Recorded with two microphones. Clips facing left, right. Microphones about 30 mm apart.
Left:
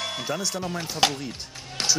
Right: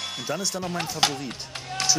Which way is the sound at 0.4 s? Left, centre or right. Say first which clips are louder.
Right 1 dB; centre.